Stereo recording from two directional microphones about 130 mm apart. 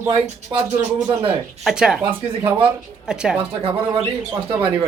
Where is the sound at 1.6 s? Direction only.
5° right (ahead or behind).